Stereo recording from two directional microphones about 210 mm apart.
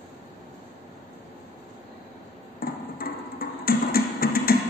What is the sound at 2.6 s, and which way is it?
Music, 45° left (ahead or behind).